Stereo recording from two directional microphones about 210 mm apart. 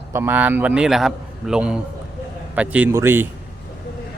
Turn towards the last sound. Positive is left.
turn(degrees=-10)  # may be behind; listen again after turning